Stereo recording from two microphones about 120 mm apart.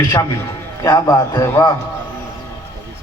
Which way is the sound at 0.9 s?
30° left (ahead or behind).